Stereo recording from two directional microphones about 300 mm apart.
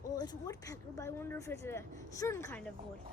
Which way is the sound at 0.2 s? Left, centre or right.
Centre.